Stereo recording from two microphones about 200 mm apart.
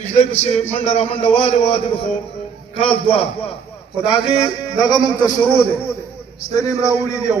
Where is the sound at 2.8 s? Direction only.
30° left (ahead or behind).